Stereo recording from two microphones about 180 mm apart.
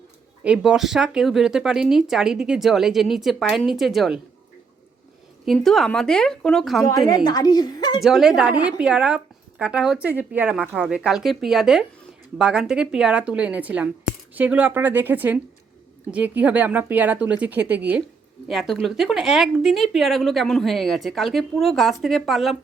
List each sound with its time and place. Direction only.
0.4 s a woman's voice: 5° right (ahead or behind)
5.5 s a woman's voice: centre (ahead or behind)
7.3 s a woman's voice: 20° left (ahead or behind)
8.0 s a woman's voice: centre (ahead or behind)